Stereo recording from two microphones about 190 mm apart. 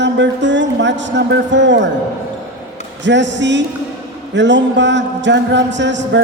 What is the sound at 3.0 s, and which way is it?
A man's voice, 70° right (ahead or behind).